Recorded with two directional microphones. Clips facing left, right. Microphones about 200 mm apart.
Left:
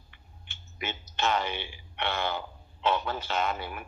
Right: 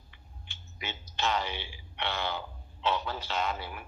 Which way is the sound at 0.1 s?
55° left (ahead or behind).